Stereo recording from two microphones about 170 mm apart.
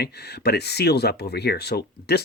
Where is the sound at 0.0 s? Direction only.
70° left (ahead or behind).